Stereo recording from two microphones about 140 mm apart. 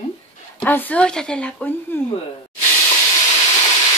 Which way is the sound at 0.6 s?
10° left (ahead or behind).